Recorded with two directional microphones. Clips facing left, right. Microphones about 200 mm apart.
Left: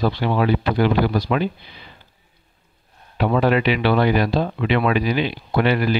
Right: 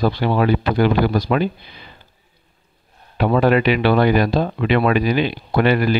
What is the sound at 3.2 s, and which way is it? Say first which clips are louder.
Speech: right 3 dB; 50° right (ahead or behind).